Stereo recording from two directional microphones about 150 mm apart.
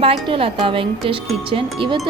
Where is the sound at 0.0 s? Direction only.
40° right (ahead or behind).